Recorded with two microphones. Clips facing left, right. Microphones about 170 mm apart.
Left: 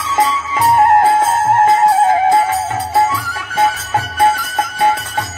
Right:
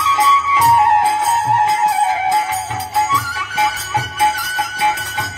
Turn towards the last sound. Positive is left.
turn(degrees=50)  # may be behind; listen again after turning